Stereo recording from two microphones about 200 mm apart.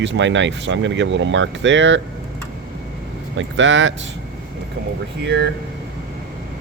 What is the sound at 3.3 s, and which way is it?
Speech, 70° right (ahead or behind).